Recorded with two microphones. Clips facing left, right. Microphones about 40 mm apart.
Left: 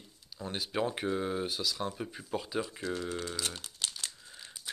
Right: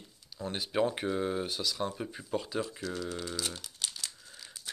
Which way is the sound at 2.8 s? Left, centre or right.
Left.